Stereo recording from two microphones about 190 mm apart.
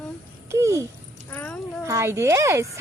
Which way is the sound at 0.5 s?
15° right (ahead or behind).